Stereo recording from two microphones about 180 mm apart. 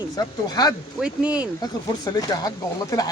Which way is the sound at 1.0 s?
5° right (ahead or behind).